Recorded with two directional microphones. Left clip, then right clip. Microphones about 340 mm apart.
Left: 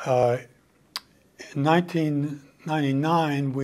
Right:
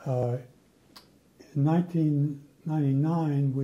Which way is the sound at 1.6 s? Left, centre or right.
Centre.